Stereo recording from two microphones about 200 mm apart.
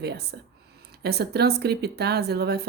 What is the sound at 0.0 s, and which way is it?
A woman's voice, 55° right (ahead or behind).